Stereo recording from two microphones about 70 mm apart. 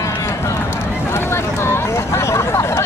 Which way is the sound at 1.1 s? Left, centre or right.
Left.